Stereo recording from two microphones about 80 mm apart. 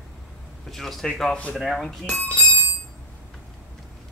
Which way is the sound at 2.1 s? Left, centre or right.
Centre.